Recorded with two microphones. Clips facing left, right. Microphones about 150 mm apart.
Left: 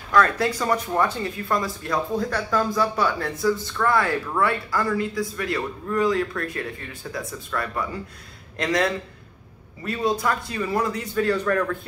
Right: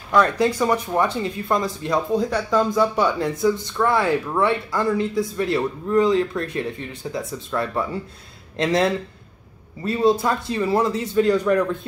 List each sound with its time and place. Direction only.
0.1 s speech: 15° right (ahead or behind)